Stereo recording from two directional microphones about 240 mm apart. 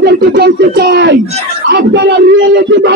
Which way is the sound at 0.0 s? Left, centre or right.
Right.